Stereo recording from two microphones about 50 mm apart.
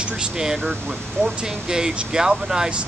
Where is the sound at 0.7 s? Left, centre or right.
Right.